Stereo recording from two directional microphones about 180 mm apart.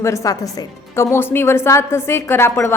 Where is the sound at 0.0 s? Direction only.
15° left (ahead or behind).